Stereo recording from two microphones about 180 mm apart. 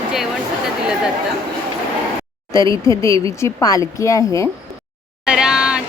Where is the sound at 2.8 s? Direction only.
15° left (ahead or behind).